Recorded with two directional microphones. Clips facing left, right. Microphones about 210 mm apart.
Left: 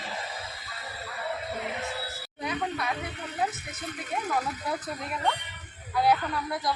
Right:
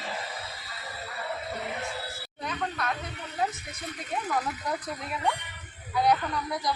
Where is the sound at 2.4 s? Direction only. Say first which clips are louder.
Left 1 dB; 10° left (ahead or behind).